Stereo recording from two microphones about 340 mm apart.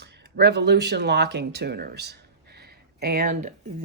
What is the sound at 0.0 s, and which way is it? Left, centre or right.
Speech, right.